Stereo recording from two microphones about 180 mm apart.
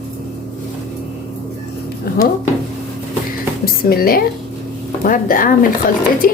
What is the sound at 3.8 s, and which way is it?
Speech, 55° left (ahead or behind).